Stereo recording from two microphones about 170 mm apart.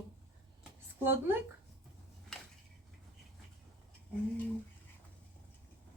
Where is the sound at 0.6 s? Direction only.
10° right (ahead or behind).